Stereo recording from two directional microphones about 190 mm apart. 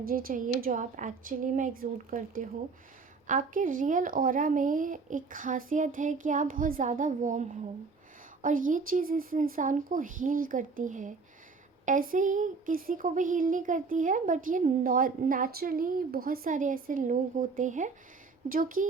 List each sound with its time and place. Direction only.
0.0 s speech: 50° right (ahead or behind)